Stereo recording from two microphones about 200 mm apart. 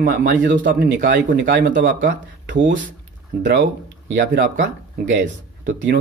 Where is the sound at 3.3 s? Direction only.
50° right (ahead or behind).